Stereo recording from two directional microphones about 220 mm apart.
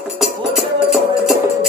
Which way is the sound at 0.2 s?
Centre (ahead or behind).